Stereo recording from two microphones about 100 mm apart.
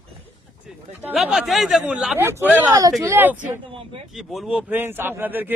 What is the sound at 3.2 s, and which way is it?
Speech, 20° right (ahead or behind).